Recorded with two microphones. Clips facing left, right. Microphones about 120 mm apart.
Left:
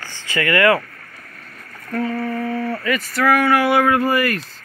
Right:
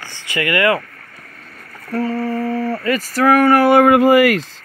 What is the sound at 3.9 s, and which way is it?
Speech, 90° right.